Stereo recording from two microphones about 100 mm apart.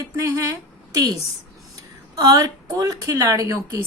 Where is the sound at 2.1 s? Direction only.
40° right (ahead or behind).